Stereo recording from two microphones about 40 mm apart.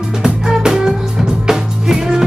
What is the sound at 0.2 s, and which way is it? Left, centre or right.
Music, centre.